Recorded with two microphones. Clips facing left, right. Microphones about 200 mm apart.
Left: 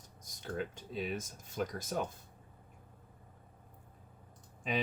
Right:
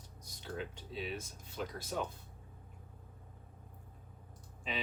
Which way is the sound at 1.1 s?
50° left (ahead or behind).